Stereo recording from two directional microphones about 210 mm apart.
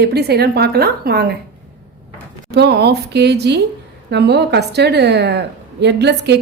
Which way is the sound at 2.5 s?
50° right (ahead or behind).